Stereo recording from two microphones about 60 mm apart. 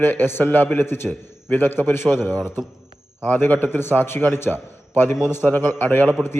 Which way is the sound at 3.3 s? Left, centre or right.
Left.